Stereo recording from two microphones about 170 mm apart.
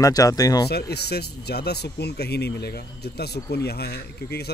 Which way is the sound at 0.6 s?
75° left (ahead or behind).